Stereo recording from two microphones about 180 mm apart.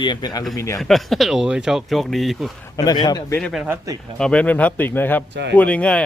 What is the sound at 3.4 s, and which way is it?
Speech, centre (ahead or behind).